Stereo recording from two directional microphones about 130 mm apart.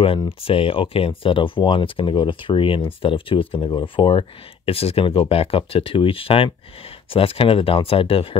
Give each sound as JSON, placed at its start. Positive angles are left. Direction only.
{"t": 0.4, "sound": "speech", "side_deg": 45}